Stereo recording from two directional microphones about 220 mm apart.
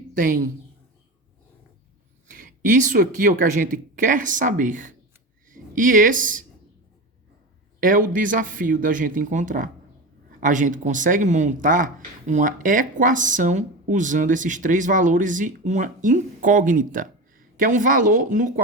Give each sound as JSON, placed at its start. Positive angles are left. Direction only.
{"t": 0.1, "sound": "a woman's voice", "side_deg": -40}
{"t": 2.4, "sound": "speech", "side_deg": -35}
{"t": 7.8, "sound": "speech", "side_deg": -40}